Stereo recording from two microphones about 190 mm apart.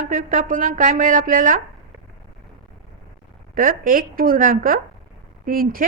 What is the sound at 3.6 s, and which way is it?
A woman's voice, 45° right (ahead or behind).